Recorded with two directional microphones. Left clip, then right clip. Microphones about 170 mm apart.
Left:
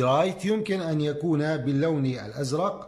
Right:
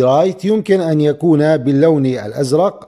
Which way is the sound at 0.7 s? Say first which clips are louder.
Right 14 dB; 45° right (ahead or behind).